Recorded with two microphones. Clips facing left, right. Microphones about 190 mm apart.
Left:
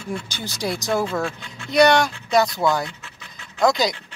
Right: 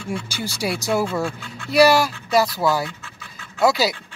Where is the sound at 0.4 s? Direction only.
10° right (ahead or behind).